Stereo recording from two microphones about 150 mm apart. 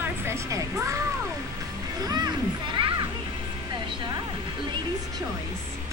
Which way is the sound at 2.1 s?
30° right (ahead or behind).